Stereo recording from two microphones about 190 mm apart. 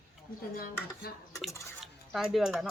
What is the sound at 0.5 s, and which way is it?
Speech, 50° left (ahead or behind).